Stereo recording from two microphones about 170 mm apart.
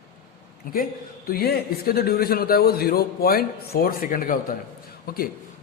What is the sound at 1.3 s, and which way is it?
A man's voice, 65° left (ahead or behind).